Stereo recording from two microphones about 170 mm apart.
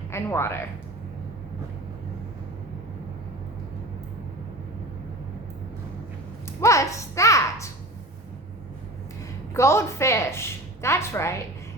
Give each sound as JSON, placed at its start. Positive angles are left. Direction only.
{"t": 0.1, "sound": "speech", "side_deg": 15}
{"t": 6.6, "sound": "a child's voice", "side_deg": 20}
{"t": 9.6, "sound": "a woman's voice", "side_deg": 15}